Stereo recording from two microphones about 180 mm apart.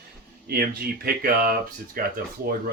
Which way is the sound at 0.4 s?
60° right (ahead or behind).